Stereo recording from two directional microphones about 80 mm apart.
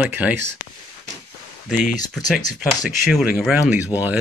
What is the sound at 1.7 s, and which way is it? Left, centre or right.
Speech, centre.